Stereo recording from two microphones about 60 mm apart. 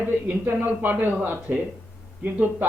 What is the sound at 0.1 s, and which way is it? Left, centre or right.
Speech, right.